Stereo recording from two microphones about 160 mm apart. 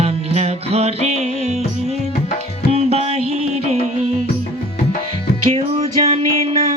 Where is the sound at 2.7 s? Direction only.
45° right (ahead or behind).